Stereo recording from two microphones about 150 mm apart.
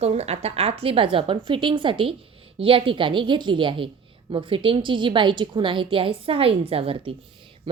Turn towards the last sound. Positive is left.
turn(degrees=-40)  # may be behind; listen again after turning